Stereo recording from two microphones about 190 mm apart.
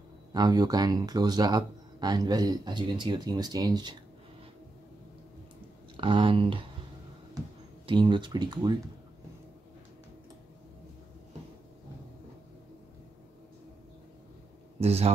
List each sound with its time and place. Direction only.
0.3 s speech: 20° right (ahead or behind)
5.9 s speech: 25° right (ahead or behind)
14.8 s speech: 35° right (ahead or behind)